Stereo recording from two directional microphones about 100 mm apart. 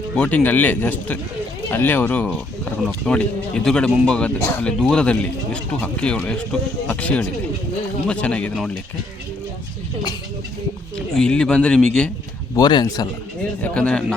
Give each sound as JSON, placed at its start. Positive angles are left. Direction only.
{"t": 0.2, "sound": "speech", "side_deg": 15}
{"t": 10.9, "sound": "speech", "side_deg": 5}
{"t": 12.5, "sound": "speech", "side_deg": 40}
{"t": 13.6, "sound": "speech", "side_deg": 10}